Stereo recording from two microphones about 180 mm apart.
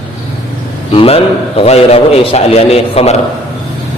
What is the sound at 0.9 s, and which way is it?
A man's voice, 30° left (ahead or behind).